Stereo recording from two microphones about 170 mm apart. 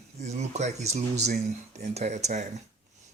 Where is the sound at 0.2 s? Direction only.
40° right (ahead or behind).